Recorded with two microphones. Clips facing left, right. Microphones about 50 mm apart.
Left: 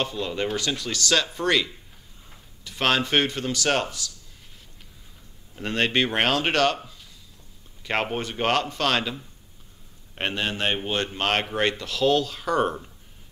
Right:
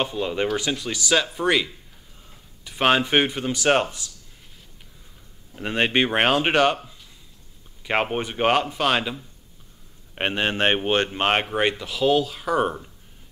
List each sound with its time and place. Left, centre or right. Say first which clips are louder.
0.0 s a man's voice: right 3 dB; centre
5.6 s speech: right 2 dB; centre
7.8 s a man's voice: right 3 dB; centre; by 10.8 s right
11.1 s a man's voice: right 3 dB; right; by 12.9 s centre